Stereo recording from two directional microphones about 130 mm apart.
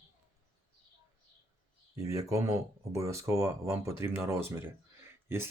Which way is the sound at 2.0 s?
25° right (ahead or behind).